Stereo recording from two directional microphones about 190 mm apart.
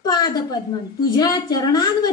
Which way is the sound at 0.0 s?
20° left (ahead or behind).